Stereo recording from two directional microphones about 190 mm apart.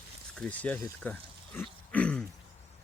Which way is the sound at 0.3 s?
5° left (ahead or behind).